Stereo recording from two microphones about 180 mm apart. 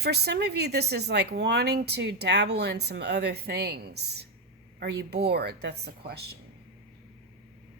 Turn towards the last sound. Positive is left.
turn(degrees=-65)  # may be behind; listen again after turning